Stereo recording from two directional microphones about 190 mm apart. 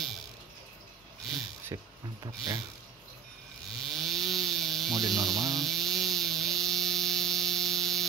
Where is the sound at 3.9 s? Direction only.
Centre (ahead or behind).